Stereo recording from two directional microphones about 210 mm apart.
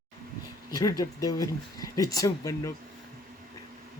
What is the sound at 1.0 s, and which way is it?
Speech, 15° left (ahead or behind).